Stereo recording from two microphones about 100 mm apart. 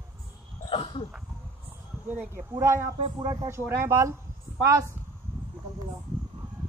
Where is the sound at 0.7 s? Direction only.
60° left (ahead or behind).